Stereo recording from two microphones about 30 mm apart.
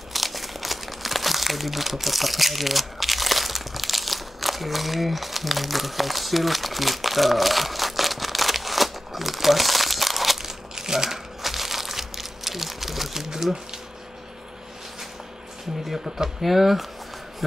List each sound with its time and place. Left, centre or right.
0.1 s crumpling: centre
10.8 s a sound: centre
11.4 s crumpling: centre
16.3 s speech: centre